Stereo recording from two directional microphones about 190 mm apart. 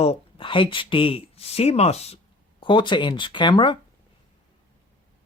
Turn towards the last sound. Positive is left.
turn(degrees=25)  # may be behind; listen again after turning